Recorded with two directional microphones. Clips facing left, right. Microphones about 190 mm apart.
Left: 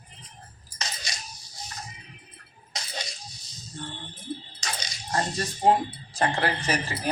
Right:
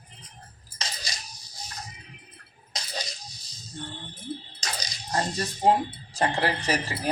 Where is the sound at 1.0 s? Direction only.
35° right (ahead or behind).